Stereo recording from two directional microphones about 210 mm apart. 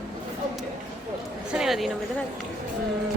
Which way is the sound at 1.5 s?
Centre (ahead or behind).